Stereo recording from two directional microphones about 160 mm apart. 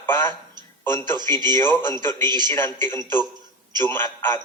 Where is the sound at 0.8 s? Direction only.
15° left (ahead or behind).